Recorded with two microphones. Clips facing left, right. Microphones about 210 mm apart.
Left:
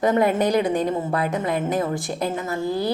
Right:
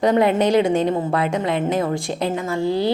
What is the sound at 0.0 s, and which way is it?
Speech, 20° right (ahead or behind).